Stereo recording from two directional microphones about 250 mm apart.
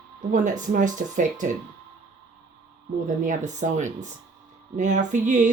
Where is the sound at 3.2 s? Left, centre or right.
Right.